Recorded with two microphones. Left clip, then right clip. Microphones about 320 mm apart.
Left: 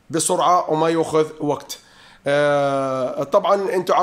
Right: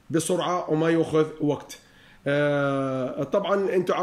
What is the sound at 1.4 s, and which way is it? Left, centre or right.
Speech, left.